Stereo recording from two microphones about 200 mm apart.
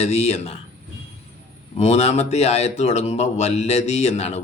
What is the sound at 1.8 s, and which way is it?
Speech, 30° left (ahead or behind).